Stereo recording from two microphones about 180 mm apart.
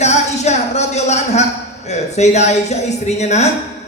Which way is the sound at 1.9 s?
40° left (ahead or behind).